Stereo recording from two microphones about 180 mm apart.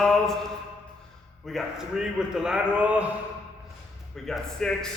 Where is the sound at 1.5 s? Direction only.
Centre (ahead or behind).